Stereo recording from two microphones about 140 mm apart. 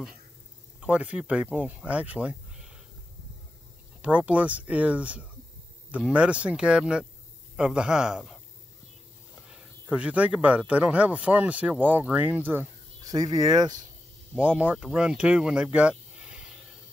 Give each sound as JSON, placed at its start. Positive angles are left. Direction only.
{"t": 0.7, "sound": "speech", "side_deg": -10}
{"t": 4.0, "sound": "speech", "side_deg": -10}
{"t": 9.5, "sound": "speech", "side_deg": -10}
{"t": 13.0, "sound": "speech", "side_deg": -25}
{"t": 14.4, "sound": "speech", "side_deg": -10}